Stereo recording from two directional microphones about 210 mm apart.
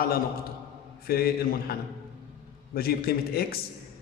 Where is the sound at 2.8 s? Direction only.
45° left (ahead or behind).